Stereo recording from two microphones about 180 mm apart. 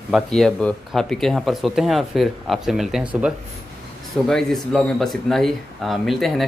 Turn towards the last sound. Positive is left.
turn(degrees=0)  # may be behind; listen again after turning